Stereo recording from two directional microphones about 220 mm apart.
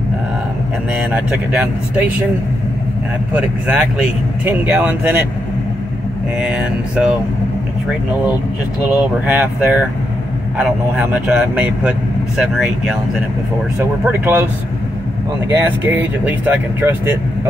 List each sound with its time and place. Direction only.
0.9 s speech: 10° right (ahead or behind)
3.3 s speech: 5° right (ahead or behind)
6.4 s a man's voice: 5° right (ahead or behind)
8.9 s a man's voice: 5° right (ahead or behind)
15.5 s speech: 10° right (ahead or behind)